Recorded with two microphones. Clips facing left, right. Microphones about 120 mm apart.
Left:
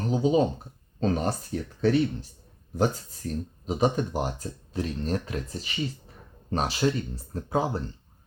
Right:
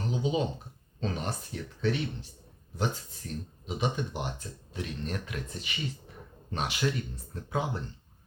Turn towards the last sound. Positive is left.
turn(degrees=35)  # may be behind; listen again after turning